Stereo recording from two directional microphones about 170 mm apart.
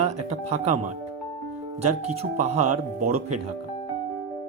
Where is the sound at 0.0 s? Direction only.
40° right (ahead or behind).